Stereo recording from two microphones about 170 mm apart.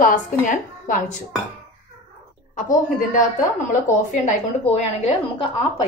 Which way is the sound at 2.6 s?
50° left (ahead or behind).